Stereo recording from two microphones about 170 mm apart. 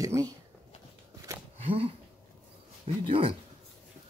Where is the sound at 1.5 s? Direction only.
35° right (ahead or behind).